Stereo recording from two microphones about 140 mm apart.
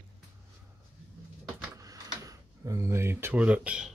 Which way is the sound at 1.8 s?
25° right (ahead or behind).